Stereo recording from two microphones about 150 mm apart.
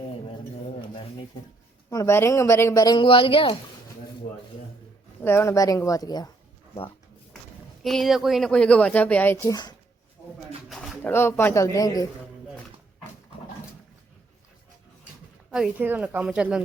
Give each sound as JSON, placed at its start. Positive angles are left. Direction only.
{"t": 0.1, "sound": "a sound", "side_deg": 40}
{"t": 1.9, "sound": "speech", "side_deg": 20}
{"t": 5.2, "sound": "speech", "side_deg": 15}
{"t": 7.9, "sound": "speech", "side_deg": 0}
{"t": 10.7, "sound": "pigeon", "side_deg": 0}
{"t": 11.0, "sound": "speech", "side_deg": 15}
{"t": 15.4, "sound": "speech", "side_deg": -5}